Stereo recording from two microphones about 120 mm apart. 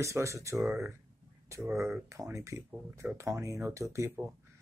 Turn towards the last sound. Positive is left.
turn(degrees=-20)  # may be behind; listen again after turning